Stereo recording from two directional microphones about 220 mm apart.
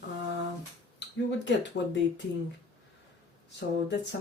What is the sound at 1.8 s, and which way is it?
Speech, 50° left (ahead or behind).